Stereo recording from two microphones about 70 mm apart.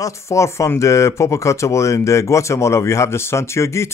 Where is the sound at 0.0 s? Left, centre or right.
Left.